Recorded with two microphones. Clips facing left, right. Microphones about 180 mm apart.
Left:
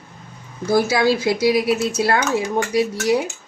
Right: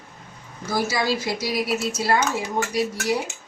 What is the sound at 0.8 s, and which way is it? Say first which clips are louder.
Speech: left 6 dB; 60° left (ahead or behind).